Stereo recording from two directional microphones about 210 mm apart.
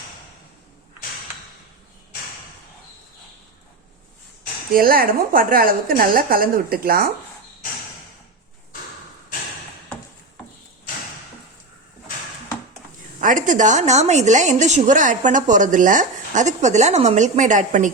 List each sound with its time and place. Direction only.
4.7 s a woman's voice: 45° right (ahead or behind)
13.1 s a woman's voice: 35° right (ahead or behind)